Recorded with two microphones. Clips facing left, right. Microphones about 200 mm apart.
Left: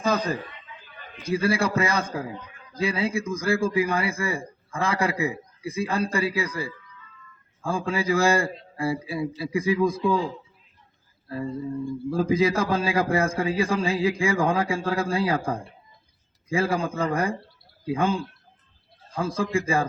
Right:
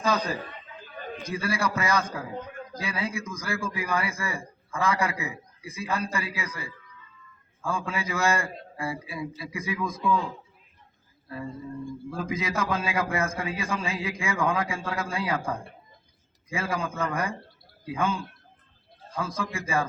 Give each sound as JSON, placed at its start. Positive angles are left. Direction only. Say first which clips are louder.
{"t": 0.0, "sound": "a man's voice", "louder": "left 2 dB", "side_deg": 50}
{"t": 0.7, "sound": "a sound", "louder": "right 8 dB", "side_deg": -40}
{"t": 1.3, "sound": "a man's voice", "louder": "left 6 dB", "side_deg": 30}
{"t": 2.4, "sound": "a sound", "louder": "right 9 dB", "side_deg": -45}
{"t": 2.7, "sound": "a man's voice", "louder": "left 7 dB", "side_deg": 30}
{"t": 12.1, "sound": "a man's voice", "louder": "left 9 dB", "side_deg": 30}